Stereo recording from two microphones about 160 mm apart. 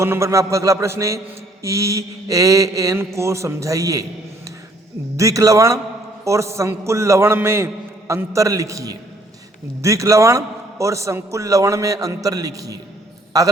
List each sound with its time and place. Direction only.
0.0 s a man's voice: 15° right (ahead or behind)
5.1 s a man's voice: 20° right (ahead or behind)